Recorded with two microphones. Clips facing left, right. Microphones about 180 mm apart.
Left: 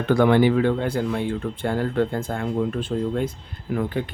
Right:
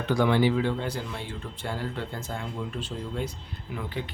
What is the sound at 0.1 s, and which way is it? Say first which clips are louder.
Speech: left 6 dB; 55° left (ahead or behind).